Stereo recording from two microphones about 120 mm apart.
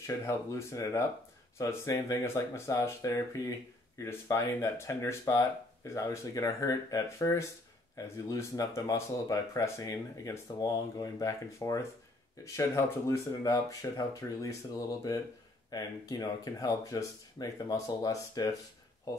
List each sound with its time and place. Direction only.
0.0 s speech: 25° left (ahead or behind)